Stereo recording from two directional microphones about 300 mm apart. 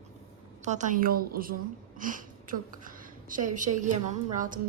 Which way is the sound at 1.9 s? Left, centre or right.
Right.